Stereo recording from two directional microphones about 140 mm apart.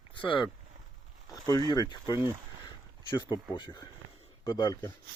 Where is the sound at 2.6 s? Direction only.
35° left (ahead or behind).